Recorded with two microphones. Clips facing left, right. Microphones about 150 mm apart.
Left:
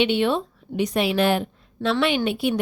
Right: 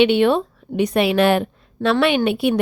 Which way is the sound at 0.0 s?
60° right (ahead or behind).